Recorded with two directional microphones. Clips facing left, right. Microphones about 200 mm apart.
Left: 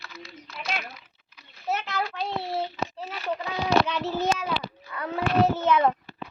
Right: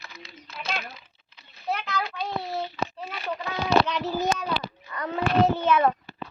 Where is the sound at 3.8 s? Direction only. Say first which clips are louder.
Even; 5° left (ahead or behind).